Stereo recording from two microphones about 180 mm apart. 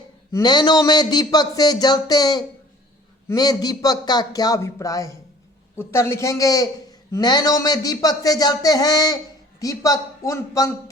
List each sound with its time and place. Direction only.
0.3 s a man's voice: 20° left (ahead or behind)